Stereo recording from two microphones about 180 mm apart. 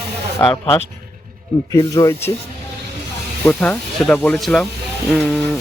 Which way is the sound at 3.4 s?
10° left (ahead or behind).